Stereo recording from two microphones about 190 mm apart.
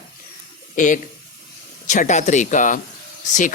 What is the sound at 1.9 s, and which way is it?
Speech, 40° left (ahead or behind).